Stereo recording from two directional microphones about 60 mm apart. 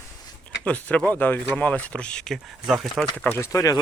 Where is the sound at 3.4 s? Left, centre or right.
Left.